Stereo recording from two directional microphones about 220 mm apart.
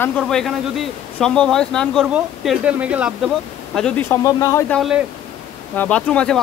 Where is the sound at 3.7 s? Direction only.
5° left (ahead or behind).